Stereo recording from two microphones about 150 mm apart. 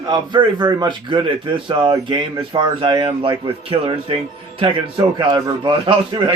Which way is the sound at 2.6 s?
30° right (ahead or behind).